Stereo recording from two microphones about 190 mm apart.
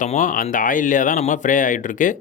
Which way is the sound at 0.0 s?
45° left (ahead or behind).